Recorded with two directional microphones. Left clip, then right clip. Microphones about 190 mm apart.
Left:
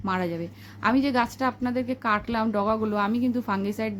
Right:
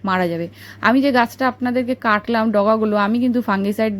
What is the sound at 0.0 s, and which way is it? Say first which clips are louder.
A woman's voice: right 8 dB; 30° right (ahead or behind).